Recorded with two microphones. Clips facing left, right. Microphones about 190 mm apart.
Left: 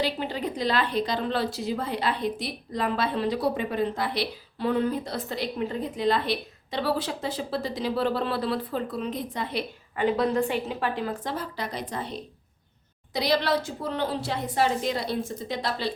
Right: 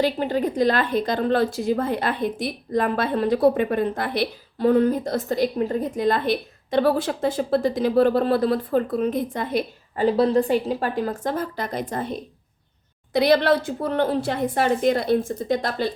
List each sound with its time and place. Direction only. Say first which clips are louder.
0.0 s a woman's voice: right 7 dB; 45° right (ahead or behind)